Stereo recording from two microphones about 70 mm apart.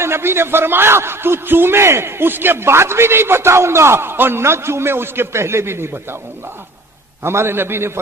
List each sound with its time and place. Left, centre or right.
0.0 s a man's voice: right
7.2 s a man's voice: right